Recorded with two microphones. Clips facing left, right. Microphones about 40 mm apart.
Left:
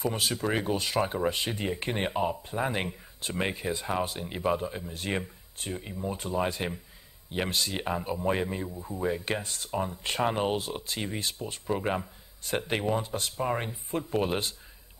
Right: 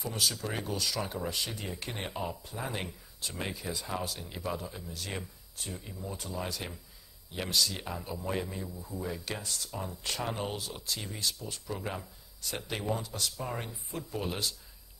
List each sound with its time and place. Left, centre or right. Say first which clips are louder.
0.0 s speech: left 5 dB; left